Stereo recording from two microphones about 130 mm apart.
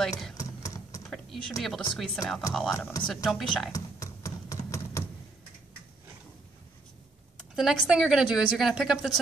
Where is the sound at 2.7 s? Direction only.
20° left (ahead or behind).